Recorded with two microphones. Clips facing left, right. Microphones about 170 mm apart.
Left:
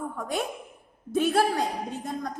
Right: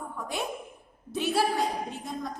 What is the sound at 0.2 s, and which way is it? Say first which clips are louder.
A woman's voice: left 1 dB; 45° left (ahead or behind).